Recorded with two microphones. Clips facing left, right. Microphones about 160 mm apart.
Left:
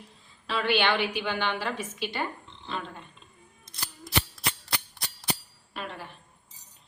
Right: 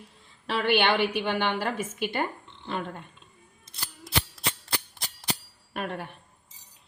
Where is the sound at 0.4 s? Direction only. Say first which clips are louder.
Right 2 dB; 60° right (ahead or behind).